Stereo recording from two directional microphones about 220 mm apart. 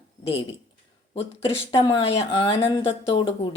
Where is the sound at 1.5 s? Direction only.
25° left (ahead or behind).